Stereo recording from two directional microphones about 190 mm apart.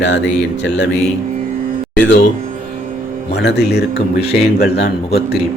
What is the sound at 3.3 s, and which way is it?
A man's voice, 60° left (ahead or behind).